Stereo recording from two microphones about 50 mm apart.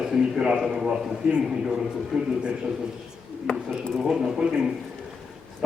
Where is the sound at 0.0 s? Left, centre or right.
Centre.